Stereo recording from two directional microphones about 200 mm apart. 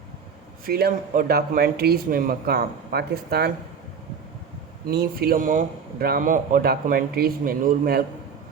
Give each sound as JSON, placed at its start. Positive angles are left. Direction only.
{"t": 0.6, "sound": "speech", "side_deg": -50}
{"t": 4.9, "sound": "speech", "side_deg": -50}